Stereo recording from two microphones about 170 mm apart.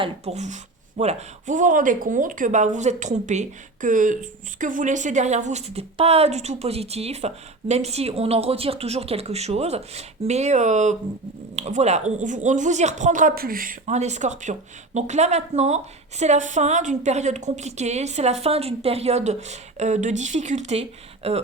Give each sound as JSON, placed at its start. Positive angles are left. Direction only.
{"t": 0.0, "sound": "speech", "side_deg": -40}